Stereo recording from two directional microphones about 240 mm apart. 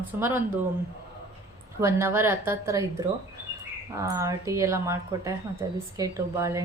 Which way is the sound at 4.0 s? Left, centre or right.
Centre.